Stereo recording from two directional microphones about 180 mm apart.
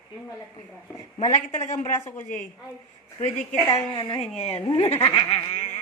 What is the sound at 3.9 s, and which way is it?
Speech, 25° left (ahead or behind).